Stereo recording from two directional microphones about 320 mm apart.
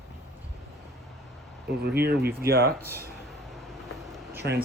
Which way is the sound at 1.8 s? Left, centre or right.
Right.